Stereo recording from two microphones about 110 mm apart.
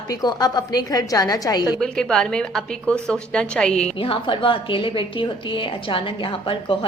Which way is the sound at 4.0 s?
55° left (ahead or behind).